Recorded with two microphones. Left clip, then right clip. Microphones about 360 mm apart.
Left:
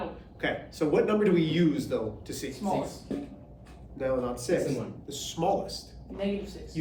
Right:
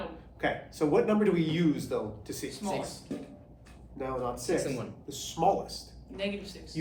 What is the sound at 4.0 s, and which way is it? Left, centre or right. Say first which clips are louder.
A man's voice: left 4 dB; centre.